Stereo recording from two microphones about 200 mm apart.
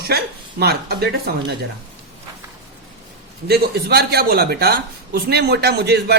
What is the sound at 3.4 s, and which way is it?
Speech, 50° right (ahead or behind).